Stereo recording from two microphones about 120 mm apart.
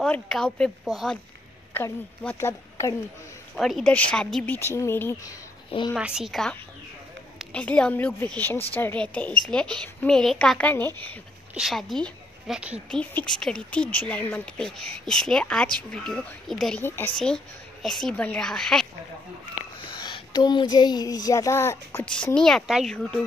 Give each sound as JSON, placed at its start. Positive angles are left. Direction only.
{"t": 0.0, "sound": "speech", "side_deg": 5}
{"t": 1.7, "sound": "a woman's voice", "side_deg": 20}
{"t": 3.5, "sound": "speech", "side_deg": 0}
{"t": 4.6, "sound": "a woman's voice", "side_deg": 20}
{"t": 5.9, "sound": "speech", "side_deg": -5}
{"t": 7.5, "sound": "speech", "side_deg": 10}
{"t": 11.5, "sound": "a woman's voice", "side_deg": 0}
{"t": 12.5, "sound": "speech", "side_deg": -10}
{"t": 12.9, "sound": "speech", "side_deg": 10}
{"t": 16.8, "sound": "a woman's voice", "side_deg": 20}
{"t": 17.8, "sound": "speech", "side_deg": 5}
{"t": 19.9, "sound": "speech", "side_deg": 40}
{"t": 22.0, "sound": "speech", "side_deg": 10}